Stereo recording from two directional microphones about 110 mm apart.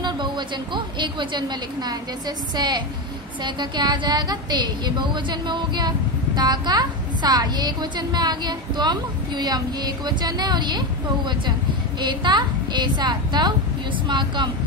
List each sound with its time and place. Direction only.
0.0 s a woman's voice: 45° right (ahead or behind)
12.0 s a woman's voice: 45° right (ahead or behind)